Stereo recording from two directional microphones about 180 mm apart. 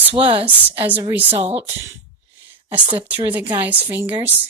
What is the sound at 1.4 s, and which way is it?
Speech, 35° right (ahead or behind).